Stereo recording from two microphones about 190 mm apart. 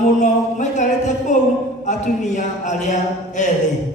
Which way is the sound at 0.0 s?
40° left (ahead or behind).